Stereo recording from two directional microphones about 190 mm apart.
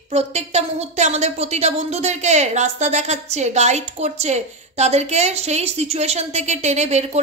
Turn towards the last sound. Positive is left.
turn(degrees=-35)  # may be behind; listen again after turning